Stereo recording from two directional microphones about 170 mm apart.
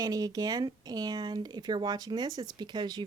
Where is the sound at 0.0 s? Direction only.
20° right (ahead or behind).